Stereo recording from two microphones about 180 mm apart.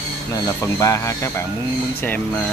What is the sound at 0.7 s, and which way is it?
Speech, 15° left (ahead or behind).